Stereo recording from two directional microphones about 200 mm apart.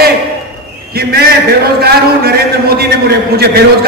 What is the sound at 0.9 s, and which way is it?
Speech, 50° right (ahead or behind).